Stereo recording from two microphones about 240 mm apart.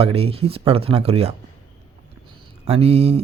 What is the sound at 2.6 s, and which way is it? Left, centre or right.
Speech, right.